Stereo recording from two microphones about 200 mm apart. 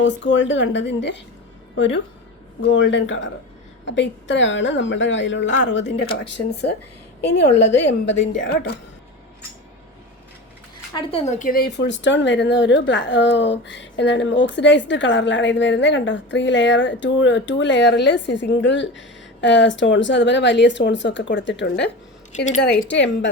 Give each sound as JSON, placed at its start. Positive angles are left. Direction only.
{"t": 0.0, "sound": "speech", "side_deg": 65}
{"t": 7.9, "sound": "speech", "side_deg": 65}
{"t": 8.4, "sound": "a woman's voice", "side_deg": 50}
{"t": 10.9, "sound": "speech", "side_deg": 30}
{"t": 22.3, "sound": "a woman's voice", "side_deg": 35}
{"t": 22.9, "sound": "speech", "side_deg": 65}